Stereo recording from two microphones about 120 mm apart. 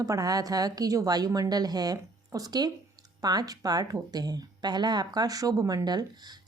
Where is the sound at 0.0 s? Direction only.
30° right (ahead or behind).